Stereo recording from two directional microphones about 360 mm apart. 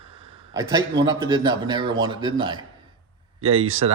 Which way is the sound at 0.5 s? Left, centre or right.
Centre.